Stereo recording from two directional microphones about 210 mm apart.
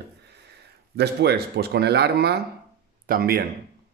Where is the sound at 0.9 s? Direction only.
50° right (ahead or behind).